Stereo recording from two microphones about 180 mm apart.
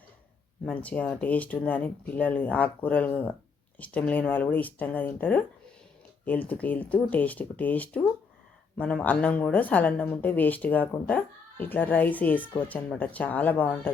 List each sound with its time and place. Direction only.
0.6 s a woman's voice: 10° left (ahead or behind)